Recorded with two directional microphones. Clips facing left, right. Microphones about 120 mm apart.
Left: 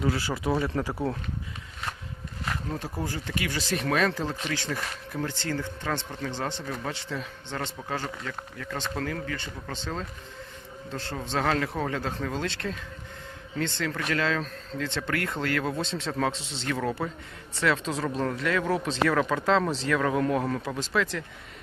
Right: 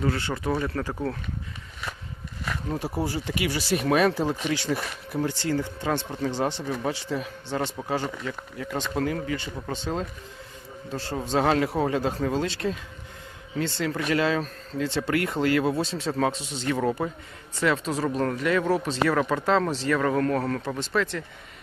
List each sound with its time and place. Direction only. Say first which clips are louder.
0.0 s speech: right 1 dB; 5° left (ahead or behind)
2.6 s speech: right 4 dB; 10° right (ahead or behind)
20.1 s speech: right 1 dB; 10° left (ahead or behind)
20.7 s speech: right 1 dB; centre (ahead or behind)